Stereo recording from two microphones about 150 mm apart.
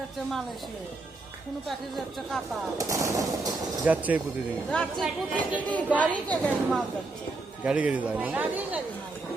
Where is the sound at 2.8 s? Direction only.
20° right (ahead or behind).